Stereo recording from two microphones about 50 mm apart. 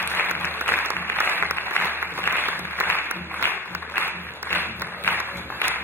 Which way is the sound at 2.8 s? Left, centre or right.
Right.